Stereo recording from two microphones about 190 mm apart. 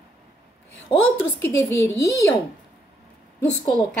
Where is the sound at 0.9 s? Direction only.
25° left (ahead or behind).